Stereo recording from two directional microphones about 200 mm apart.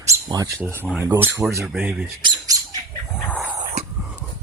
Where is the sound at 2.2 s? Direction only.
20° right (ahead or behind).